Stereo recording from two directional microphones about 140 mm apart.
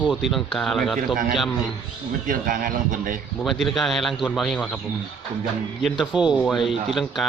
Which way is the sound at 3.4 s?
Centre (ahead or behind).